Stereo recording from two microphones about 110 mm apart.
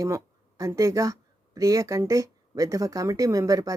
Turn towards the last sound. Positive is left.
turn(degrees=-30)  # may be behind; listen again after turning